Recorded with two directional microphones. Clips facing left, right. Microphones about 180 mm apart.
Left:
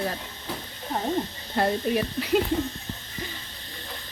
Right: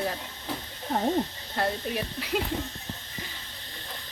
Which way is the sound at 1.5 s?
Centre (ahead or behind).